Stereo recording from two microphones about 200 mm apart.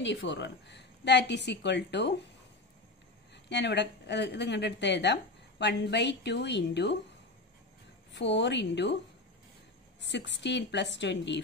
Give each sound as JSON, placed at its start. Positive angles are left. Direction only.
{"t": 0.0, "sound": "speech", "side_deg": 65}
{"t": 3.4, "sound": "speech", "side_deg": 60}
{"t": 8.1, "sound": "speech", "side_deg": 60}
{"t": 10.0, "sound": "speech", "side_deg": 60}